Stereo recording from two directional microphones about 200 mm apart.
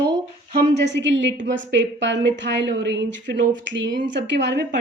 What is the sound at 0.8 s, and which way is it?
A woman's voice, 60° right (ahead or behind).